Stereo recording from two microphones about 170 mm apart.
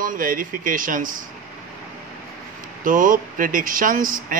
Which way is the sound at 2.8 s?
50° right (ahead or behind).